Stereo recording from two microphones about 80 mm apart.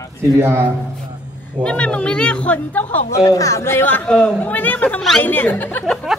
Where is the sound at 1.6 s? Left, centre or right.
Centre.